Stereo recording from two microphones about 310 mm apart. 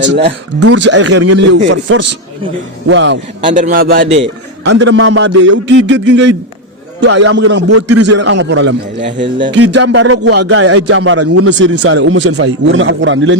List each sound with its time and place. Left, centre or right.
0.0 s speech: right
1.7 s speech: right
3.4 s speech: right
7.7 s a man's voice: right
8.2 s speech: right
9.5 s speech: right